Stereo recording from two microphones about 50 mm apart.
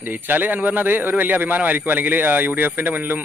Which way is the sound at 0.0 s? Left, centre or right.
Right.